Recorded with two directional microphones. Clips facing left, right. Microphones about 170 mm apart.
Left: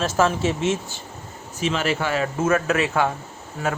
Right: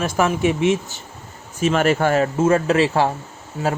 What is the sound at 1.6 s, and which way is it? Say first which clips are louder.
Speech: right 6 dB; 50° right (ahead or behind).